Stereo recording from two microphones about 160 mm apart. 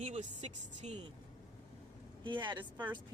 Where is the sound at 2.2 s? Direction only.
30° right (ahead or behind).